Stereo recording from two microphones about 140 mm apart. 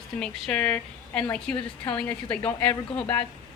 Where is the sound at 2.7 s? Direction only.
40° left (ahead or behind).